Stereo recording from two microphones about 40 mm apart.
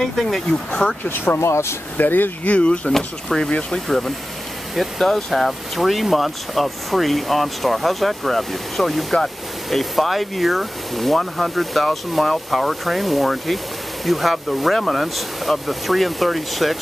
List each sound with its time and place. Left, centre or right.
0.1 s speech: centre
1.0 s speech: left
2.4 s speech: left
4.7 s speech: centre